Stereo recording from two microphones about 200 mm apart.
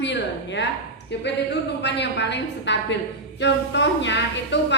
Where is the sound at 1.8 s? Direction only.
60° left (ahead or behind).